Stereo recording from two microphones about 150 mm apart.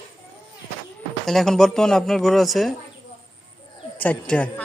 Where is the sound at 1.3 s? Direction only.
Centre (ahead or behind).